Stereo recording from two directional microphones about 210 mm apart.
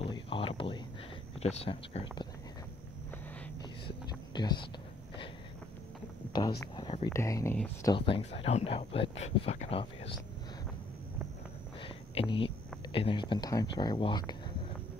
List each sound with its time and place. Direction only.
0.0 s a sound: 25° left (ahead or behind)
1.4 s speech: 30° left (ahead or behind)
3.8 s whispering: 20° left (ahead or behind)
6.6 s speech: 20° left (ahead or behind)
7.9 s speech: 25° left (ahead or behind)
11.8 s speech: 25° left (ahead or behind)